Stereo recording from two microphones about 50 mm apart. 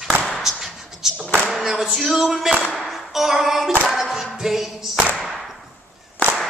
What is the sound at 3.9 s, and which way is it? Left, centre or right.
Music, centre.